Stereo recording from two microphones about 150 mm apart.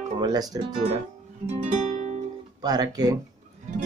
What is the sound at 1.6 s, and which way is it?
Music, 55° right (ahead or behind).